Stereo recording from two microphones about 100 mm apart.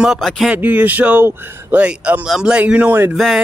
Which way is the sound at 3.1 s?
Centre (ahead or behind).